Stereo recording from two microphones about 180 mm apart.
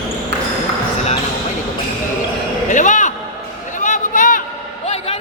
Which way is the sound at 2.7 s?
45° left (ahead or behind).